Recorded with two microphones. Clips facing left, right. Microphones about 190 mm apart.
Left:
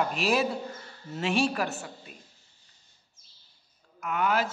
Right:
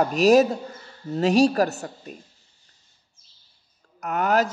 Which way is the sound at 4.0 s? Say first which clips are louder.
Right 5 dB; 40° right (ahead or behind).